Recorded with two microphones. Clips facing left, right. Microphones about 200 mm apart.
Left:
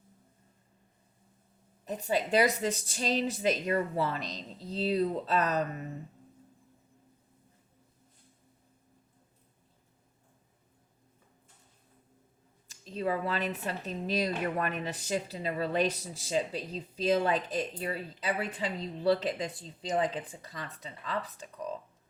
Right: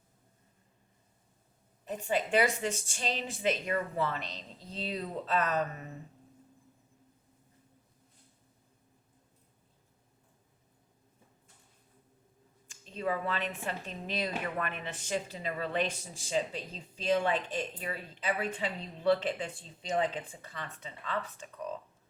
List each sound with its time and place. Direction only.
1.8 s speech: 40° left (ahead or behind)
12.6 s speech: 35° left (ahead or behind)